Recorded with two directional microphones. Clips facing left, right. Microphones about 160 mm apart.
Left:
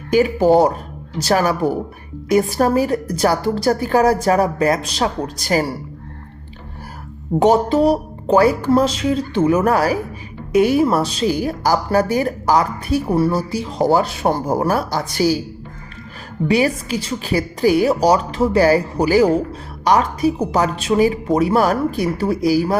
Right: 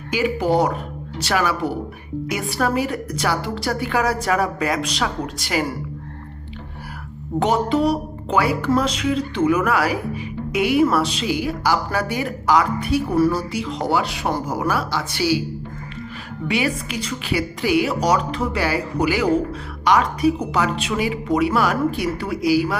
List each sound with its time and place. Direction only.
0.3 s speech: 30° left (ahead or behind)
7.4 s speech: 35° left (ahead or behind)
16.5 s speech: 40° left (ahead or behind)